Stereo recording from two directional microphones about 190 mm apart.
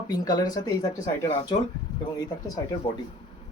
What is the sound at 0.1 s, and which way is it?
Speech, 20° left (ahead or behind).